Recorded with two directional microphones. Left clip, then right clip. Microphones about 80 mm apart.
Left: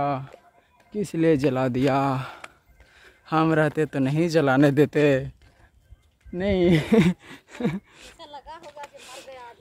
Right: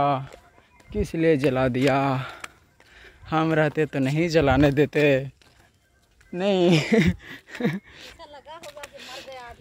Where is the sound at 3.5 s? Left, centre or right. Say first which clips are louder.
Even; left.